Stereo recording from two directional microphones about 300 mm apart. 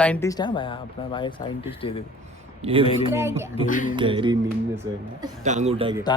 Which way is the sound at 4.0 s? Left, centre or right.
Centre.